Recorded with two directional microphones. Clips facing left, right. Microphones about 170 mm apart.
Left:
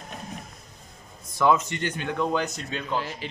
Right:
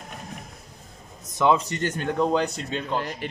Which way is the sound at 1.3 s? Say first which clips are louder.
Right 1 dB; 25° right (ahead or behind).